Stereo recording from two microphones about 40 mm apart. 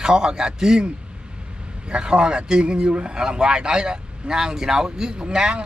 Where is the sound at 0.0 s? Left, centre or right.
Centre.